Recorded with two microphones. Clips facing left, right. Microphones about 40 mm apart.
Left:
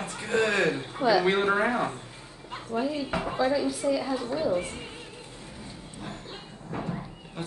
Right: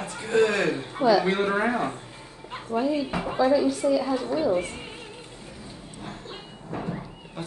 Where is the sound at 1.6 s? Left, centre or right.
Centre.